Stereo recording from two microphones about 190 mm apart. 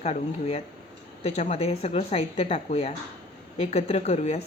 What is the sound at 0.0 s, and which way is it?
A woman's voice, 35° left (ahead or behind).